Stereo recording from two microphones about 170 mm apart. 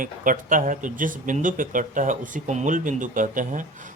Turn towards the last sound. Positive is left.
turn(degrees=-50)  # may be behind; listen again after turning